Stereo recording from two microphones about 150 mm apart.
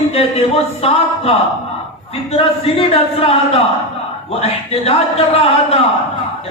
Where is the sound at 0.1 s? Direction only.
45° left (ahead or behind).